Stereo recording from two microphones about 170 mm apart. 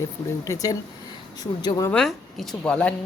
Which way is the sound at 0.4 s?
20° left (ahead or behind).